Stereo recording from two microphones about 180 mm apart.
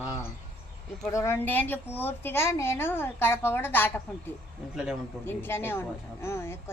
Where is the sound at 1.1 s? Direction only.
15° left (ahead or behind).